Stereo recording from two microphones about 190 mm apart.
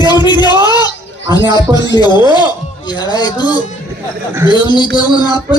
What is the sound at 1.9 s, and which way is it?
A man's voice, 20° left (ahead or behind).